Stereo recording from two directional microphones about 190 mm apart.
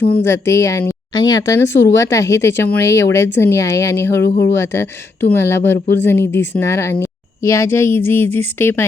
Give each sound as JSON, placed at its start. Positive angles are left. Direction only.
{"t": 0.2, "sound": "a woman's voice", "side_deg": 15}